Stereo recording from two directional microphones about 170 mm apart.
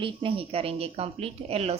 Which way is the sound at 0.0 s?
30° right (ahead or behind).